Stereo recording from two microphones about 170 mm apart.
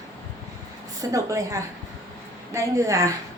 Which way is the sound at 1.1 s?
20° right (ahead or behind).